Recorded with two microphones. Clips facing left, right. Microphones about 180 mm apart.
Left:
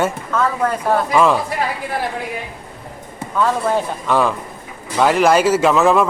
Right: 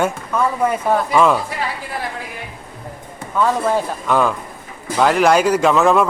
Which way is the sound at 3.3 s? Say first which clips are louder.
Even; 5° right (ahead or behind).